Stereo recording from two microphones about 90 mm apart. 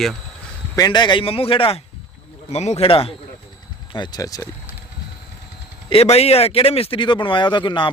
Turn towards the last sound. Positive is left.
turn(degrees=60)  # may be behind; listen again after turning